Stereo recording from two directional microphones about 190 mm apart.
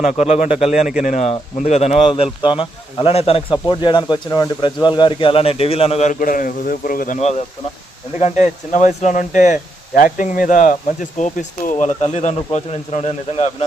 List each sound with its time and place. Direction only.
0.0 s speech: 35° left (ahead or behind)
7.2 s speech: 35° left (ahead or behind)